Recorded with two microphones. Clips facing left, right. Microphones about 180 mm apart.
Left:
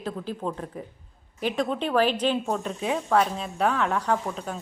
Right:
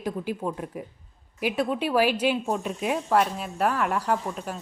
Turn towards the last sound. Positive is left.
turn(degrees=-5)  # may be behind; listen again after turning